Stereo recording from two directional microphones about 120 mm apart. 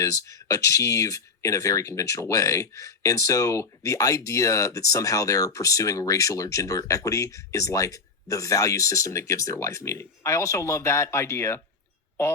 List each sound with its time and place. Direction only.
0.0 s speech: 30° left (ahead or behind)